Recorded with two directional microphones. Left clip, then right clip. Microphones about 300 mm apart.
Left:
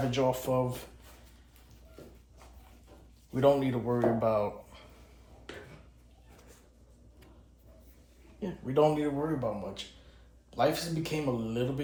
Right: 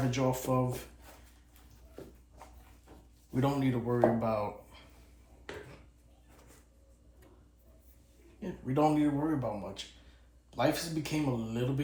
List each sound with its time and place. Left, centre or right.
0.1 s speech: centre
3.3 s speech: centre
8.4 s speech: centre